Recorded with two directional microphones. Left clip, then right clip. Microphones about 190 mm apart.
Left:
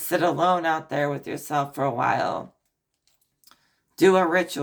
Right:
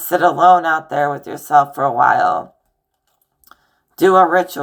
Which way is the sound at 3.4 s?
20° left (ahead or behind).